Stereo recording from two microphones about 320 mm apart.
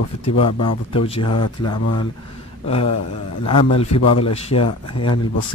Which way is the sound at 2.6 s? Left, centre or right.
Centre.